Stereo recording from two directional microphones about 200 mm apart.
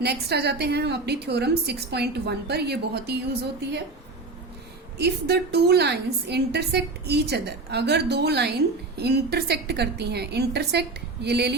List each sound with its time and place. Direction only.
0.0 s a woman's voice: 55° right (ahead or behind)
4.9 s a woman's voice: 55° right (ahead or behind)